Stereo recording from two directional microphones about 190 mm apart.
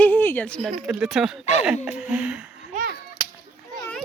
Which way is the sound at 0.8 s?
5° right (ahead or behind).